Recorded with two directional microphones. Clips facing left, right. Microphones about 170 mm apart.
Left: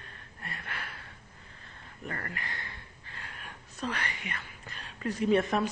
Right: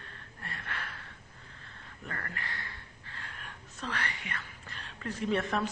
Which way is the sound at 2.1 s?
15° left (ahead or behind).